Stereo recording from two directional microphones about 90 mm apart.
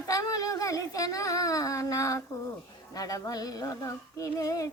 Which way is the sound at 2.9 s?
40° left (ahead or behind).